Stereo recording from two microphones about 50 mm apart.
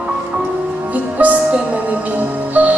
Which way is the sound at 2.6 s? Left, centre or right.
Right.